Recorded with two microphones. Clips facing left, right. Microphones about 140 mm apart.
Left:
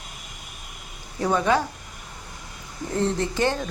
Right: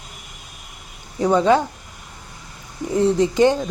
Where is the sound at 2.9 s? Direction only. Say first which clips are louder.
Right 8 dB; 15° right (ahead or behind).